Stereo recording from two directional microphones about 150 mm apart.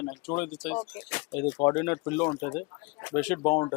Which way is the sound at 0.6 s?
10° left (ahead or behind).